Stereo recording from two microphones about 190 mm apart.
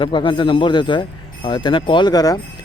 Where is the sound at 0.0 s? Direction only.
25° left (ahead or behind).